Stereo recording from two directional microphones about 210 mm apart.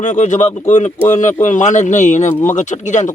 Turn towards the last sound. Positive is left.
turn(degrees=35)  # may be behind; listen again after turning